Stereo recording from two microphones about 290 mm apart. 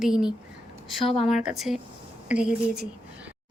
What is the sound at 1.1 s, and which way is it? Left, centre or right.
Speech, centre.